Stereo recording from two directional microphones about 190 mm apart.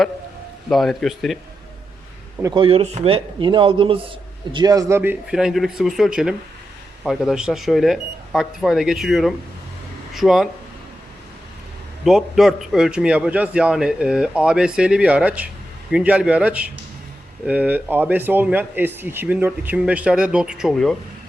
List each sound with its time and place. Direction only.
0.7 s a man's voice: centre (ahead or behind)
2.4 s a man's voice: 25° right (ahead or behind); by 10.5 s centre (ahead or behind)
12.0 s a man's voice: centre (ahead or behind)